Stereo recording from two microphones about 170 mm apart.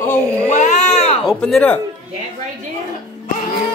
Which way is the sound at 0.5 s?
45° left (ahead or behind).